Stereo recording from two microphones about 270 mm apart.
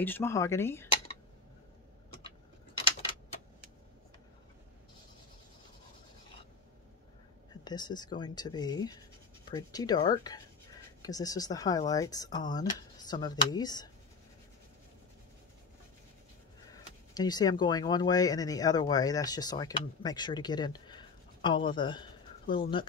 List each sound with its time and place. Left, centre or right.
0.0 s speech: centre
7.6 s speech: centre
17.1 s speech: centre